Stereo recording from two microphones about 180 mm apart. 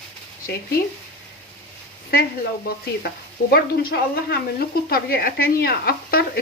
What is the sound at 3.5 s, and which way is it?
Speech, 60° left (ahead or behind).